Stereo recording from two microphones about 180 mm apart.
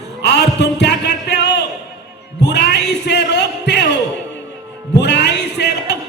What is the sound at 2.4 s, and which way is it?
Music, 70° left (ahead or behind).